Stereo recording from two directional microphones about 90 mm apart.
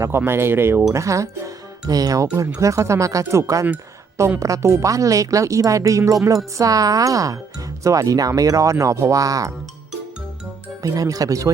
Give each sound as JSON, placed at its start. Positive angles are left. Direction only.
{"t": 0.2, "sound": "speech", "side_deg": -25}
{"t": 10.8, "sound": "speech", "side_deg": -40}